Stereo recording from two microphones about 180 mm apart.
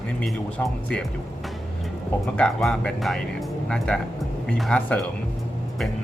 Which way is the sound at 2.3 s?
5° left (ahead or behind).